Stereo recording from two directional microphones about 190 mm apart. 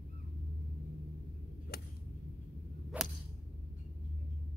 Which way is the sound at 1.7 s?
55° left (ahead or behind).